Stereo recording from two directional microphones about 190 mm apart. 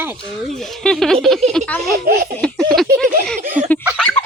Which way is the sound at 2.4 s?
5° left (ahead or behind).